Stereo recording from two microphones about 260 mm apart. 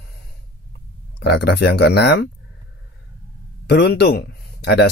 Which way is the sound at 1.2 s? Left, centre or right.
Left.